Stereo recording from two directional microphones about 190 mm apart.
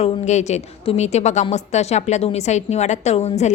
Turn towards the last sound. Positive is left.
turn(degrees=35)  # may be behind; listen again after turning